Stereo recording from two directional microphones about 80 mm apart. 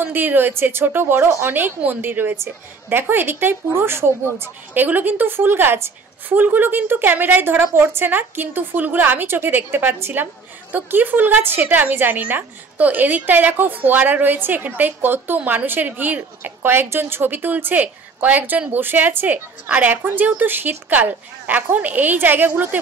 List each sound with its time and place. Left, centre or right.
0.0 s a woman's voice: right